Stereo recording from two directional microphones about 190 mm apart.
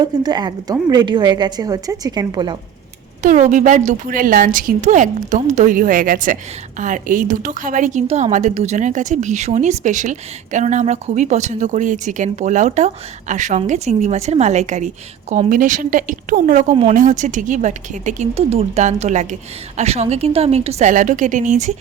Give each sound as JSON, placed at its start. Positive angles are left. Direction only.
{"t": 0.0, "sound": "a woman's voice", "side_deg": -20}
{"t": 3.2, "sound": "a woman's voice", "side_deg": -40}